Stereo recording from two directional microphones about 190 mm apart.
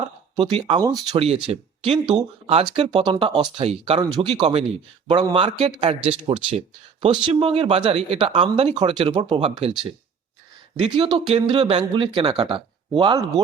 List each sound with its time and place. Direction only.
0.3 s speech: 30° right (ahead or behind)
10.8 s speech: 25° right (ahead or behind)